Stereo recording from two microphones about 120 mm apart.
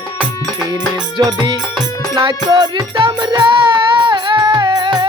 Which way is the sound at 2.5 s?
35° right (ahead or behind).